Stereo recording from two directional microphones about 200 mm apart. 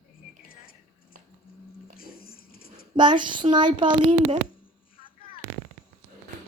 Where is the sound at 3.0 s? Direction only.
25° right (ahead or behind).